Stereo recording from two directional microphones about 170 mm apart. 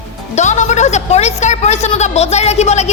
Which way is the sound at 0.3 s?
45° left (ahead or behind).